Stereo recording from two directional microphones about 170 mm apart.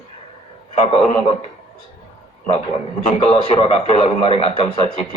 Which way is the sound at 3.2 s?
35° left (ahead or behind).